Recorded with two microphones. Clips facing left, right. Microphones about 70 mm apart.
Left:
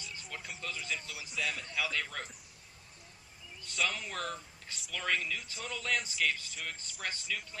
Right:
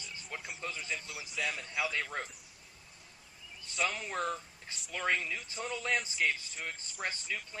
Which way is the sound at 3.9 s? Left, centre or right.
Centre.